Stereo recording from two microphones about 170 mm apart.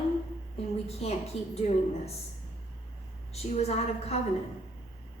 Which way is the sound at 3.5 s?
40° left (ahead or behind).